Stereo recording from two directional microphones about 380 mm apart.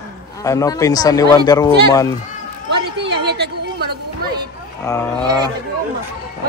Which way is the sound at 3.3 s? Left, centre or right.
Right.